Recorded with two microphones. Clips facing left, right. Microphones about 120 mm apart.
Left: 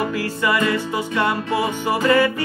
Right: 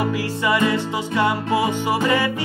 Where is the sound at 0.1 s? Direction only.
20° right (ahead or behind).